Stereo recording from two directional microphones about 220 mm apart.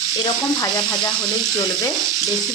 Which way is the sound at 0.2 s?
15° left (ahead or behind).